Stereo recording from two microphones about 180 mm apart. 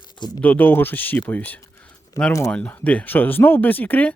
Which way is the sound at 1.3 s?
10° left (ahead or behind).